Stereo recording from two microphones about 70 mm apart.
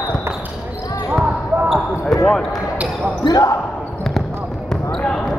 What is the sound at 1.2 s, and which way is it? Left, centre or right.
Basketball bounce, centre.